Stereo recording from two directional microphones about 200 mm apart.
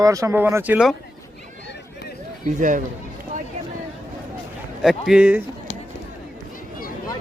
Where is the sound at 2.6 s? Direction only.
40° right (ahead or behind).